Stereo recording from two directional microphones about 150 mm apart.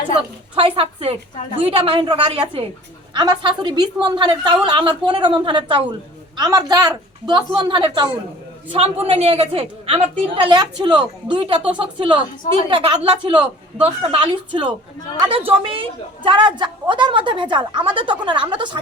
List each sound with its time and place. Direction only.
0.5 s a woman's voice: 35° right (ahead or behind)